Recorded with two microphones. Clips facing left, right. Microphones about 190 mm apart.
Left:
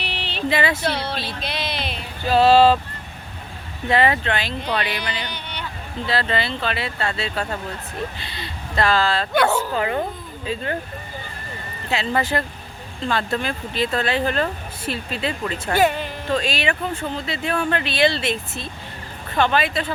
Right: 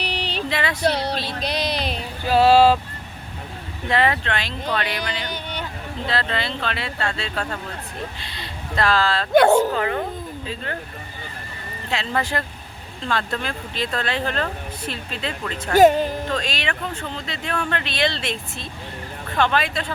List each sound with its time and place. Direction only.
0.0 s a sound: 40° right (ahead or behind)
0.5 s speech: 5° left (ahead or behind)
0.9 s speech: 40° right (ahead or behind)
1.4 s a sound: 40° right (ahead or behind)
2.2 s speech: 10° right (ahead or behind)
3.8 s speech: 5° left (ahead or behind)
5.2 s a sound: 45° right (ahead or behind)
6.1 s speech: 5° left (ahead or behind)
9.3 s speech: 45° right (ahead or behind)
9.7 s speech: 15° left (ahead or behind)
11.9 s speech: 5° left (ahead or behind)
15.7 s speech: 40° right (ahead or behind)
16.3 s speech: 5° left (ahead or behind)